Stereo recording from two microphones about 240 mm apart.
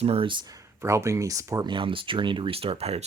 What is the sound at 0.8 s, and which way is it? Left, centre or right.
Speech, centre.